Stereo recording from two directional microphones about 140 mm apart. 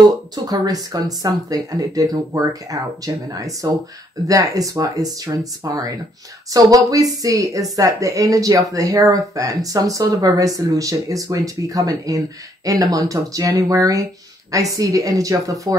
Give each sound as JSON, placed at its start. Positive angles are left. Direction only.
{"t": 0.5, "sound": "speech", "side_deg": -25}